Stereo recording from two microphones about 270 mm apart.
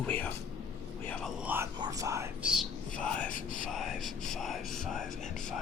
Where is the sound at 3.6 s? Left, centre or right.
Centre.